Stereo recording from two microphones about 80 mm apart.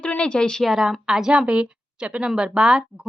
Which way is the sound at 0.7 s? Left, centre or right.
Centre.